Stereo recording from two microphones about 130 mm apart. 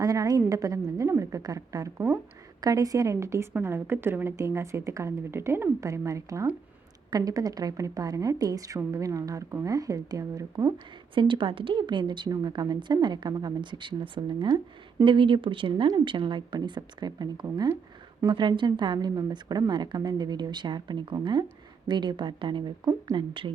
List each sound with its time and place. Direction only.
0.0 s a woman's voice: 30° right (ahead or behind)
11.1 s a woman's voice: 40° right (ahead or behind)